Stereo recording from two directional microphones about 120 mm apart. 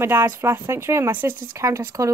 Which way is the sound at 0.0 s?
20° right (ahead or behind).